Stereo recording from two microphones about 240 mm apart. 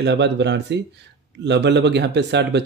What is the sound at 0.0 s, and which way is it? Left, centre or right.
Speech, right.